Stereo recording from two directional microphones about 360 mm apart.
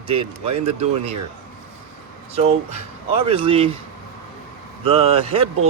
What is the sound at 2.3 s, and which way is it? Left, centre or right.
Speech, centre.